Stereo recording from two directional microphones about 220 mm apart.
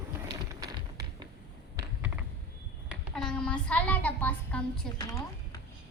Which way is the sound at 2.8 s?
5° left (ahead or behind).